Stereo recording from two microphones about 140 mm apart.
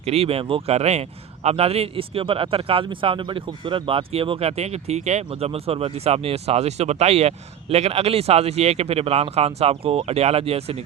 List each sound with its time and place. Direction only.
0.0 s speech: 45° right (ahead or behind)